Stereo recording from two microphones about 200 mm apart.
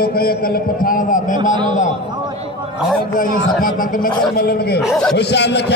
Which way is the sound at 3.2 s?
45° left (ahead or behind).